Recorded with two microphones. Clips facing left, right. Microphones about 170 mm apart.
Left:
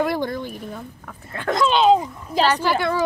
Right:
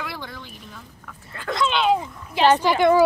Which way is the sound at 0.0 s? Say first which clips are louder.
Left 12 dB; 50° left (ahead or behind).